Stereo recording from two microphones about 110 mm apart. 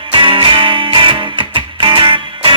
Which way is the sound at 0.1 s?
50° right (ahead or behind).